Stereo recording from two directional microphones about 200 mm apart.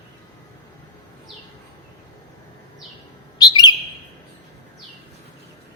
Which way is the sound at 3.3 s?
20° left (ahead or behind).